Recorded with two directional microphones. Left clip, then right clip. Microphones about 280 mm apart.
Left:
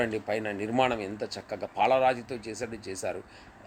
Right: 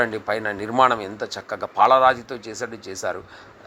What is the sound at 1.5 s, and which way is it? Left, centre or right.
Speech, right.